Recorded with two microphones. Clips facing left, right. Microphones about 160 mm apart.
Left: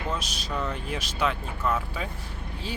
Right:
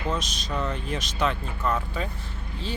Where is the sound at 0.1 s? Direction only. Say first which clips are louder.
Right 3 dB; 10° left (ahead or behind).